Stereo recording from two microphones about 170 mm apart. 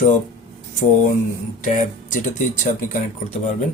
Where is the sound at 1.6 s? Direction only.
50° left (ahead or behind).